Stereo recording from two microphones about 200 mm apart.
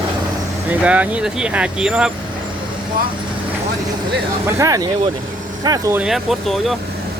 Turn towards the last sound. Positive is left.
turn(degrees=0)  # may be behind; listen again after turning